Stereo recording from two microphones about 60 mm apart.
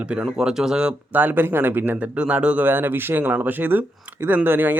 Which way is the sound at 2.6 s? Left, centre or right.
Right.